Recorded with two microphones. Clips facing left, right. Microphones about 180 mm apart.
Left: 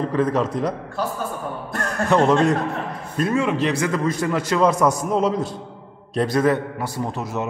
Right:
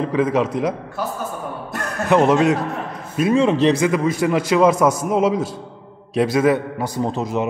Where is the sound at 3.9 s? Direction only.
10° right (ahead or behind).